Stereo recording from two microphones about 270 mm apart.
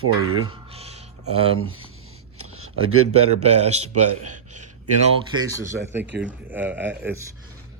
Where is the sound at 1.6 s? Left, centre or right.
Right.